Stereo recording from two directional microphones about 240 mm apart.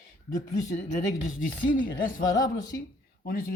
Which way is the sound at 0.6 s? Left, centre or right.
Left.